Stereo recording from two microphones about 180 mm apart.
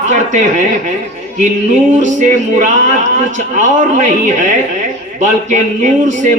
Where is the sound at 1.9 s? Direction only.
45° right (ahead or behind).